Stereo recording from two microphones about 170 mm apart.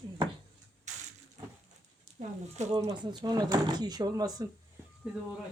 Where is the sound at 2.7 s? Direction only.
20° right (ahead or behind).